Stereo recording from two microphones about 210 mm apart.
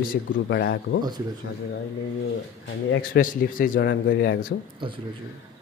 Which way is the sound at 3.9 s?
55° left (ahead or behind).